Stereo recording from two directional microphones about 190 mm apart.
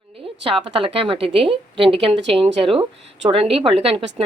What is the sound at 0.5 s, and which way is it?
A woman's voice, 25° right (ahead or behind).